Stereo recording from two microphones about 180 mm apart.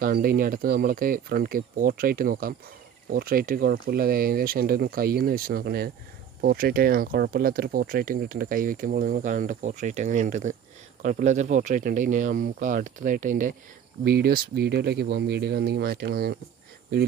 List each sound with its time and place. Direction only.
0.0 s speech: 55° right (ahead or behind)